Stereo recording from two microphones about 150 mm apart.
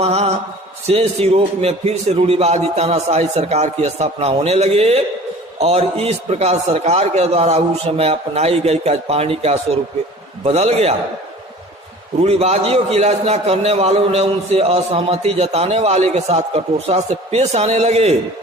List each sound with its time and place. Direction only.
0.0 s mantra: 45° right (ahead or behind)
0.9 s a man's voice: 40° right (ahead or behind)
12.2 s a man's voice: 45° right (ahead or behind)